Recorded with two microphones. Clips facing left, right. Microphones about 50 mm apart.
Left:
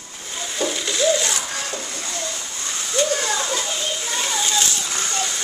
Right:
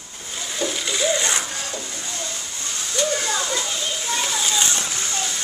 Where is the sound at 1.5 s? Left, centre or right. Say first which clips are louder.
Left 2 dB; left.